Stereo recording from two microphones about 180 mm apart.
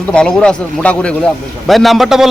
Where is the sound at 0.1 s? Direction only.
5° left (ahead or behind).